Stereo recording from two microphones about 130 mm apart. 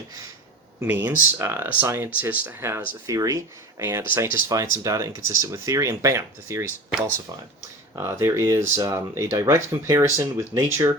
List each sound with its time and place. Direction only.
0.8 s speech: 15° right (ahead or behind)
7.9 s speech: 20° right (ahead or behind)